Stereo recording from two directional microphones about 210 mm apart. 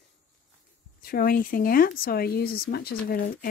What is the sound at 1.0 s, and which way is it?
Speech, 45° left (ahead or behind).